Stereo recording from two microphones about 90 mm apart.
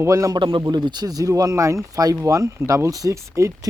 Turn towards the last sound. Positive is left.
turn(degrees=-35)  # may be behind; listen again after turning